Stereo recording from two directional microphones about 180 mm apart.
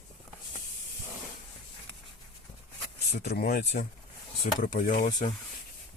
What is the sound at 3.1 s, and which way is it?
Speech, 60° left (ahead or behind).